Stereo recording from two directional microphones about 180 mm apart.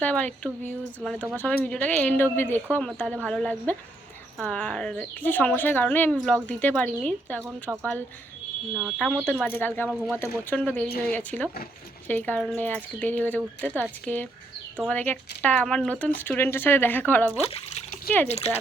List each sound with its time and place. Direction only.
0.0 s speech: 10° left (ahead or behind)
1.3 s speech: 5° left (ahead or behind)
7.4 s speech: 15° right (ahead or behind)
8.7 s speech: 5° left (ahead or behind)
9.4 s speech: 10° left (ahead or behind)
17.3 s speech: 35° left (ahead or behind)